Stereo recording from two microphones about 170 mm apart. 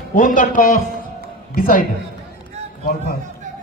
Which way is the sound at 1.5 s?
60° left (ahead or behind).